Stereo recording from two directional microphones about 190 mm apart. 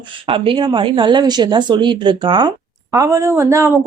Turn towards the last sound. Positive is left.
turn(degrees=-15)  # may be behind; listen again after turning